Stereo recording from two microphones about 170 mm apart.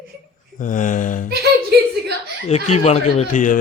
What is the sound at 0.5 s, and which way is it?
Speech, 50° left (ahead or behind).